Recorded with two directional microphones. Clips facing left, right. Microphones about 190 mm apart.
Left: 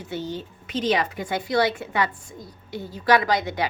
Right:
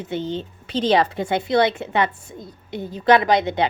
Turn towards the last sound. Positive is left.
turn(degrees=-20)  # may be behind; listen again after turning